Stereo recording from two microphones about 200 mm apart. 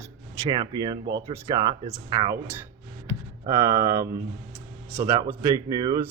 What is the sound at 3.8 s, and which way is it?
Speech, 15° right (ahead or behind).